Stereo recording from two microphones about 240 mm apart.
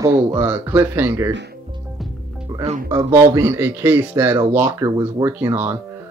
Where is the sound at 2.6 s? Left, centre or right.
Right.